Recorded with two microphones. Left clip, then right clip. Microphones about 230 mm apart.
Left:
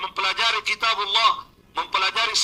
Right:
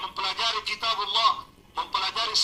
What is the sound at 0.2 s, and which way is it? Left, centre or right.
A man's voice, left.